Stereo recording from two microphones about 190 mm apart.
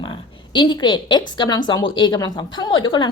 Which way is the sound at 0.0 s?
25° left (ahead or behind).